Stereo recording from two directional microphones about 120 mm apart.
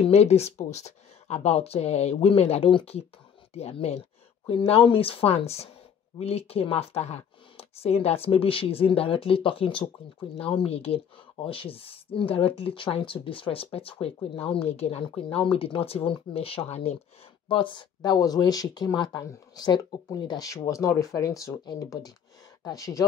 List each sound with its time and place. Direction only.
0.0 s speech: 60° left (ahead or behind)
17.5 s speech: 45° left (ahead or behind); by 23.0 s 25° left (ahead or behind)